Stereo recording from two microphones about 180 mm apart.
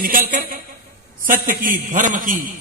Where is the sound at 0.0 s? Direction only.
50° right (ahead or behind).